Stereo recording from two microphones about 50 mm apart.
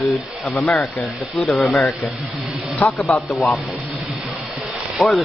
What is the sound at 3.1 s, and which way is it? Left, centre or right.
Speech, left.